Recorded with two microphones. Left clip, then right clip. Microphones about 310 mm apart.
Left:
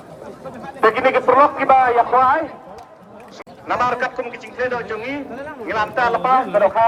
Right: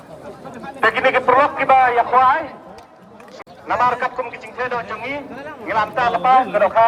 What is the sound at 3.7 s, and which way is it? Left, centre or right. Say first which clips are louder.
A man's voice: right 1 dB; right.